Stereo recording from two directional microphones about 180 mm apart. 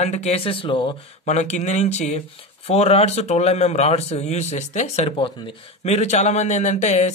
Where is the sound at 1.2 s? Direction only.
40° left (ahead or behind).